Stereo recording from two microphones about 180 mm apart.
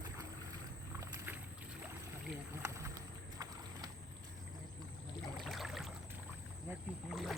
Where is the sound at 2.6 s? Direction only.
15° right (ahead or behind).